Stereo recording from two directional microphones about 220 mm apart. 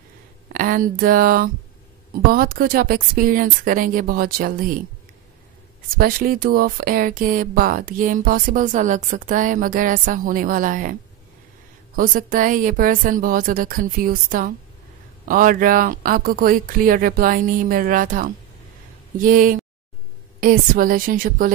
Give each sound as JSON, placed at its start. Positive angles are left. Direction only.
{"t": 0.5, "sound": "speech", "side_deg": -40}
{"t": 5.9, "sound": "speech", "side_deg": -40}